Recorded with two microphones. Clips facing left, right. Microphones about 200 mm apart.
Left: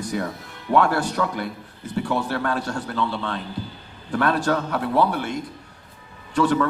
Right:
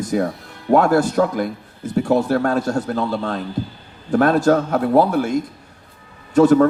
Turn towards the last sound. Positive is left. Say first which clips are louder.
# right 8 dB
turn(degrees=-45)  # may be behind; listen again after turning